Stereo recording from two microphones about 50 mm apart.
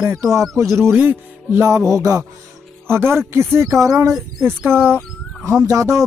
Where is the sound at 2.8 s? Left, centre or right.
Right.